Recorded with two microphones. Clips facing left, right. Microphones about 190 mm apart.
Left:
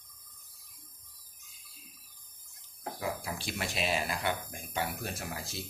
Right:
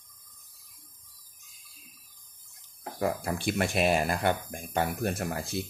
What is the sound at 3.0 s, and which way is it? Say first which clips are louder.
Speech: right 8 dB; 50° right (ahead or behind).